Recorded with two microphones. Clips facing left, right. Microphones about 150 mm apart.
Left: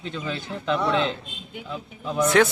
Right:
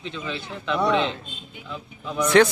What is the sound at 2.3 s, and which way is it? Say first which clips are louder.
Speech: right 3 dB; 5° left (ahead or behind).